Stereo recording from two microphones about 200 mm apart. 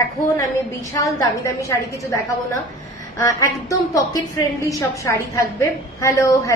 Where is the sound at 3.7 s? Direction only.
15° left (ahead or behind).